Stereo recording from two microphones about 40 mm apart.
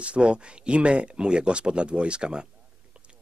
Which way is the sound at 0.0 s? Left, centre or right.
Right.